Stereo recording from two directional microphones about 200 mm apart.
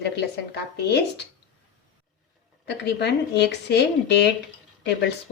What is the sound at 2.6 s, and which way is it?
Speech, 55° left (ahead or behind).